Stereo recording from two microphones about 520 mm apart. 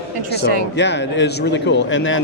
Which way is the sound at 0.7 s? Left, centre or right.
Centre.